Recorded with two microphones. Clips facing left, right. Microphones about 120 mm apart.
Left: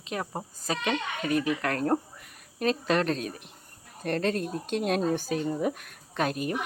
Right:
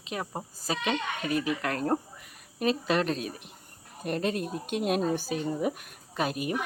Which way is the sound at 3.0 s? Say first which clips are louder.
Left 1 dB; 40° left (ahead or behind).